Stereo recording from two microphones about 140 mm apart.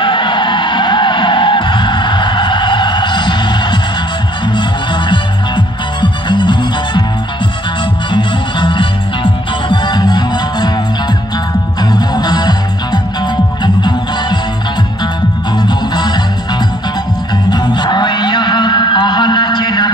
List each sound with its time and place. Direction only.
0.0 s music: 35° left (ahead or behind)
5.9 s music: 35° left (ahead or behind)
8.1 s music: 35° left (ahead or behind)
11.9 s music: 30° left (ahead or behind)
15.5 s music: 30° left (ahead or behind)